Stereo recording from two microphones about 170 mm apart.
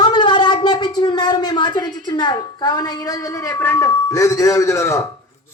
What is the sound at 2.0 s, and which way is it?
A man's voice, 25° left (ahead or behind).